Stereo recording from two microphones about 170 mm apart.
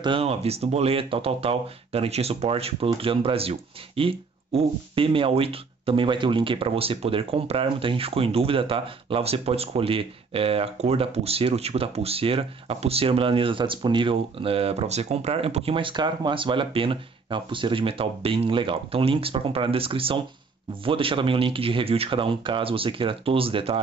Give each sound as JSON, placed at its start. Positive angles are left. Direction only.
{"t": 0.0, "sound": "speech", "side_deg": -35}